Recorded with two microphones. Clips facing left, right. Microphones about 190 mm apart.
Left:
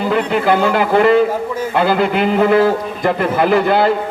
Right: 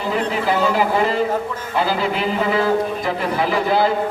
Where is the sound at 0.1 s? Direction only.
65° left (ahead or behind).